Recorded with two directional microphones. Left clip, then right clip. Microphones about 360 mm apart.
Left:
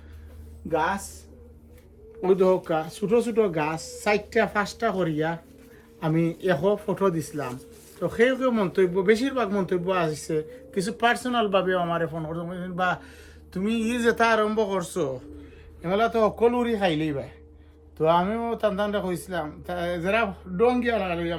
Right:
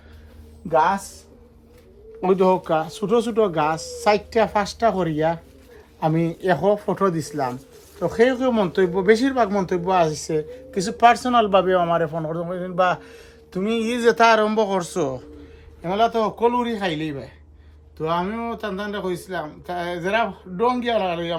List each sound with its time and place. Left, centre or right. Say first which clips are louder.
2.2 s speech: right 3 dB; centre
15.8 s speech: right 2 dB; centre